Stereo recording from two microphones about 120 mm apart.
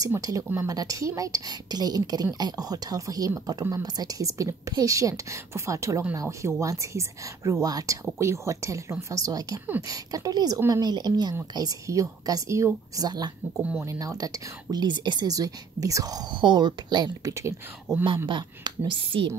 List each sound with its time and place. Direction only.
0.2 s a woman's voice: 30° right (ahead or behind)
13.6 s speech: 10° right (ahead or behind)
13.8 s a woman's voice: 30° right (ahead or behind)
18.9 s speech: 45° right (ahead or behind)